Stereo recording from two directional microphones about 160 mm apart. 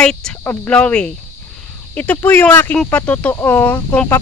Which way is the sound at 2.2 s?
10° left (ahead or behind).